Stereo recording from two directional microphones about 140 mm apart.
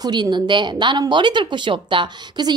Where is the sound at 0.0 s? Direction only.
30° right (ahead or behind).